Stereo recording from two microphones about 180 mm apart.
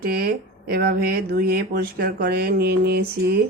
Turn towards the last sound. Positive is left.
turn(degrees=-60)  # may be behind; listen again after turning